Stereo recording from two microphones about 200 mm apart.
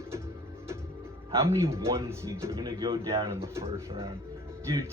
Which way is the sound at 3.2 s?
15° right (ahead or behind).